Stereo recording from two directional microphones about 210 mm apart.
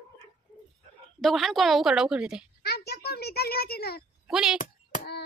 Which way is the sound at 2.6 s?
50° left (ahead or behind).